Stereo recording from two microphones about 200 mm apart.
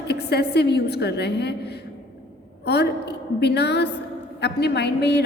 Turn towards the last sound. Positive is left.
turn(degrees=55)  # may be behind; listen again after turning